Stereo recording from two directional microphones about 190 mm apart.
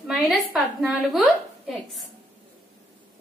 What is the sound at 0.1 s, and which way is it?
A woman's voice, centre (ahead or behind).